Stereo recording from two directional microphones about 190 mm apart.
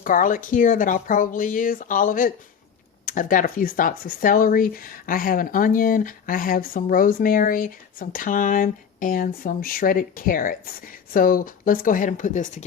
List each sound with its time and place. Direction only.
0.0 s speech: 45° left (ahead or behind)